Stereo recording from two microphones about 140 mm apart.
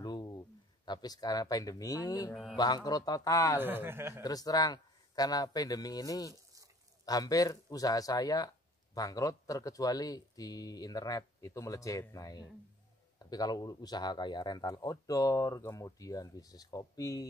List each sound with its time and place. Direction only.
0.0 s a sound: 30° left (ahead or behind)
0.8 s speech: 30° left (ahead or behind)
3.5 s speech: 15° right (ahead or behind)
4.2 s speech: 25° left (ahead or behind)